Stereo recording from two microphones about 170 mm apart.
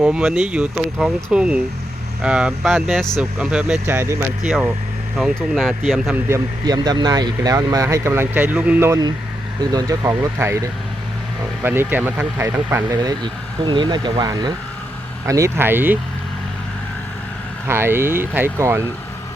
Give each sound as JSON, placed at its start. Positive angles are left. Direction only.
{"t": 0.0, "sound": "speech", "side_deg": -5}
{"t": 4.4, "sound": "speech", "side_deg": 0}
{"t": 6.2, "sound": "speech", "side_deg": -20}
{"t": 17.7, "sound": "speech", "side_deg": -15}